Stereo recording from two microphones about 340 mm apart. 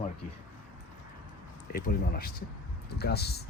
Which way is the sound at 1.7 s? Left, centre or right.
Left.